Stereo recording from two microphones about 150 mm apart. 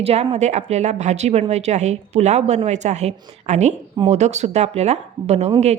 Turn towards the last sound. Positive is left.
turn(degrees=-45)  # may be behind; listen again after turning